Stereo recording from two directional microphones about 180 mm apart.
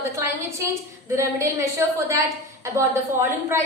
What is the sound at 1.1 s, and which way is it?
A woman's voice, 15° right (ahead or behind).